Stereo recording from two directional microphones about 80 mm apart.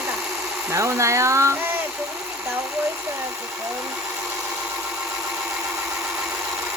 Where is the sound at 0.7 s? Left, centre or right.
Right.